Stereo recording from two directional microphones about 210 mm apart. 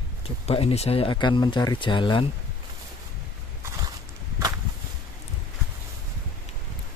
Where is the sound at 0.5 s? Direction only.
30° left (ahead or behind).